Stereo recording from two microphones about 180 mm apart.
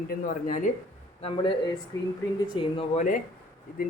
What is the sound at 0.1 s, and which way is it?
Speech, 50° left (ahead or behind).